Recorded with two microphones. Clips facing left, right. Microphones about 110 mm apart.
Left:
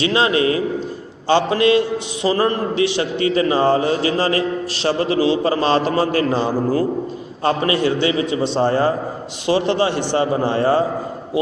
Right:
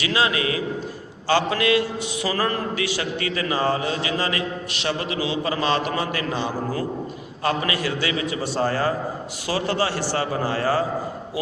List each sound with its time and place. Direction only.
0.0 s a man's voice: 30° left (ahead or behind)